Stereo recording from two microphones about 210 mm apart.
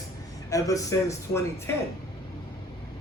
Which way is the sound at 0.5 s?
15° left (ahead or behind).